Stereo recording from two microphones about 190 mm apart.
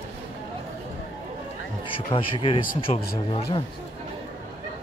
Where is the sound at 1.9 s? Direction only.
30° left (ahead or behind).